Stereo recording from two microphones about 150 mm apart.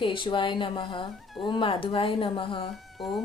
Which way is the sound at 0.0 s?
35° left (ahead or behind).